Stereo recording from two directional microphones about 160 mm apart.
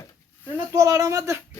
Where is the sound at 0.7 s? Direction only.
20° right (ahead or behind).